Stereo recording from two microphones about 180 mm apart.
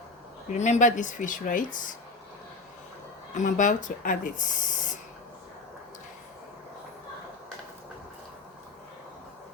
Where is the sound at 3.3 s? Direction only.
45° left (ahead or behind).